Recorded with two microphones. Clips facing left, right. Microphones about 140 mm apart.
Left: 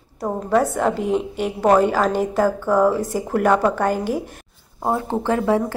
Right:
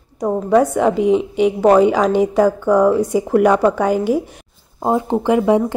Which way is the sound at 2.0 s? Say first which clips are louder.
Right 5 dB; 15° right (ahead or behind).